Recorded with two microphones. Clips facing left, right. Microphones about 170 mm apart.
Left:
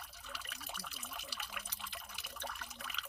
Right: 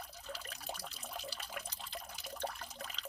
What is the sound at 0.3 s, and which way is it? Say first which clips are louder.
Water: right 5 dB; 35° right (ahead or behind).